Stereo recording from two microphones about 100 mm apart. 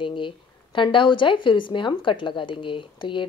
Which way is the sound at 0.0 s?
55° left (ahead or behind).